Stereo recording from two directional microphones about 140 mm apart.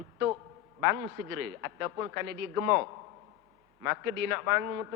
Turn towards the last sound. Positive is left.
turn(degrees=-20)  # may be behind; listen again after turning